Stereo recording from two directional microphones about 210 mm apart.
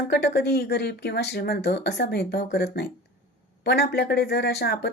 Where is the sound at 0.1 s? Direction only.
50° left (ahead or behind).